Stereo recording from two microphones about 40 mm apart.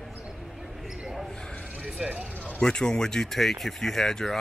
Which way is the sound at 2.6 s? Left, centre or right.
Centre.